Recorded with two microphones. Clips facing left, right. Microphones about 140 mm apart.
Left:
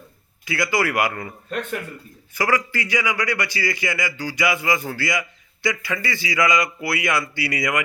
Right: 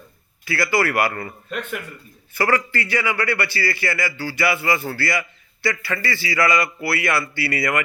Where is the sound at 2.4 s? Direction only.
10° left (ahead or behind).